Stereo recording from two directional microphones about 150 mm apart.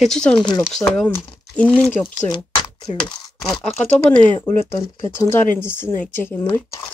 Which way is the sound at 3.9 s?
10° left (ahead or behind).